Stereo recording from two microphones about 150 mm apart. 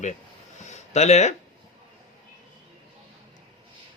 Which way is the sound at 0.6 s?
50° left (ahead or behind).